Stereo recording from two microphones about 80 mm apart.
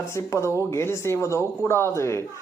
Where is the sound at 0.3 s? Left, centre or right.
Left.